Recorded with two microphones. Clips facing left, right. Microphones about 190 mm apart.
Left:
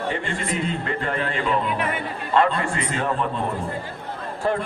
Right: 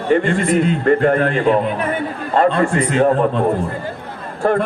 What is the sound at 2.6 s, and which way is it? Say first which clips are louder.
Speech: right 11 dB; 45° right (ahead or behind).